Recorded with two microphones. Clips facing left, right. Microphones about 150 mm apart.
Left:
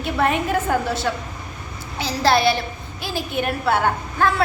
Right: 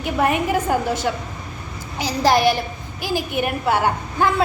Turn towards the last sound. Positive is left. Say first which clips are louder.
# even
turn(degrees=-15)  # may be behind; listen again after turning